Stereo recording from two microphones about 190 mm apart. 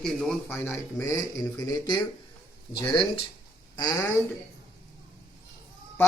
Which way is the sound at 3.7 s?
20° left (ahead or behind).